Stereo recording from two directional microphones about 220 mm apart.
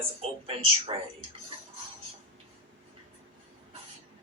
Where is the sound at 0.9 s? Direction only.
25° right (ahead or behind).